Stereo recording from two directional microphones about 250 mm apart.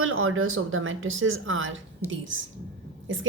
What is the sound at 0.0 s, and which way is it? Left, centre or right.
A woman's voice, right.